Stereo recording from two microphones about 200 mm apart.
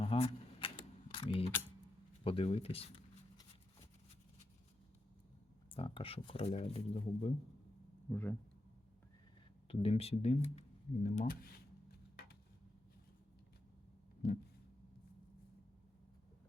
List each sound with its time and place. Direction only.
0.0 s typewriter: 30° left (ahead or behind)
1.1 s mechanisms: 25° left (ahead or behind)
2.2 s shuffling cards: 30° left (ahead or behind)
5.7 s speech: 25° left (ahead or behind)
8.1 s speech: 10° left (ahead or behind)
9.6 s speech: 30° left (ahead or behind)